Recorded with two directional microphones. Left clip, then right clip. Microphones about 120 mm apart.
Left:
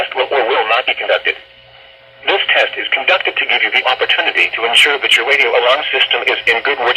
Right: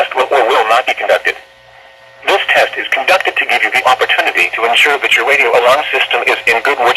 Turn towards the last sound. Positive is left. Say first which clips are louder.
# right 3 dB
turn(degrees=-40)  # may be behind; listen again after turning